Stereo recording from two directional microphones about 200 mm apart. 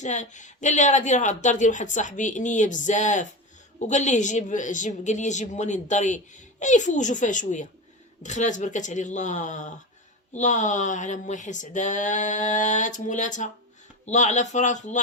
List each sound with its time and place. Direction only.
0.0 s speech: 35° left (ahead or behind)